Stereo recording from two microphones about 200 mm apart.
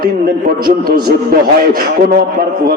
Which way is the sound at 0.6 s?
45° right (ahead or behind).